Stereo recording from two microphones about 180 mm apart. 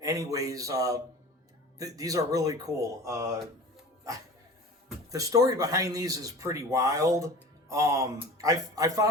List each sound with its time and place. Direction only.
0.0 s speech: 20° right (ahead or behind)
5.1 s speech: 20° right (ahead or behind)